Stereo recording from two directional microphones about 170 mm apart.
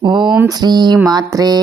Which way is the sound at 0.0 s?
25° right (ahead or behind).